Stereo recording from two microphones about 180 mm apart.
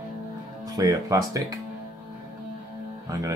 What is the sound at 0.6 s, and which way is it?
Speech, 20° right (ahead or behind).